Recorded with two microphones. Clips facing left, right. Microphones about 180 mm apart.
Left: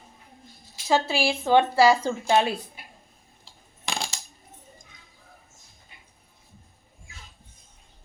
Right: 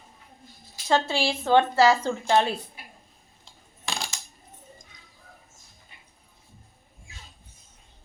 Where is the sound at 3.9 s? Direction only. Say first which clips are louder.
Left 2 dB; 25° left (ahead or behind).